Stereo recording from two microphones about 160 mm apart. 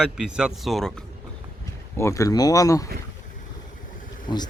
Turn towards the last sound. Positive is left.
turn(degrees=25)  # may be behind; listen again after turning